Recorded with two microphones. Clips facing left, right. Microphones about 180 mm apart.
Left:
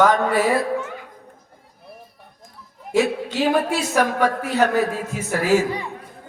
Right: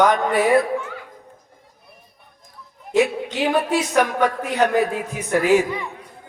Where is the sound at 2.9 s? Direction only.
20° right (ahead or behind).